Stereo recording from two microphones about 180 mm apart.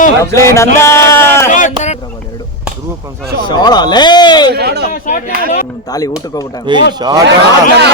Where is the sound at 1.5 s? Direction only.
45° left (ahead or behind).